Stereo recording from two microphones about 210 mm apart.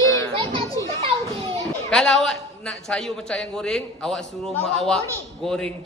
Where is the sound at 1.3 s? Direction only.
25° right (ahead or behind).